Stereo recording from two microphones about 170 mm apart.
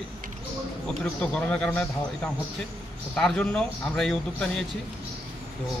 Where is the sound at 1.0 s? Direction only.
5° left (ahead or behind).